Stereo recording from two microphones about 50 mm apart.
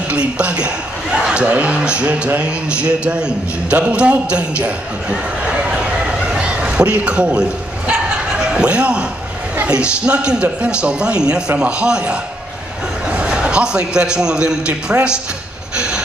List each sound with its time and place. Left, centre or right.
0.1 s a man's voice: right
5.5 s a sound: centre
8.4 s a man's voice: right
15.7 s train: centre